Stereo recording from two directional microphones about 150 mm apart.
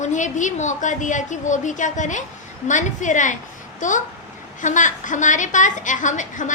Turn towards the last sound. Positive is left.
turn(degrees=55)  # may be behind; listen again after turning